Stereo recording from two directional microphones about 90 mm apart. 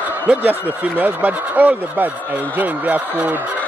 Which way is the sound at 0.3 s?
20° right (ahead or behind).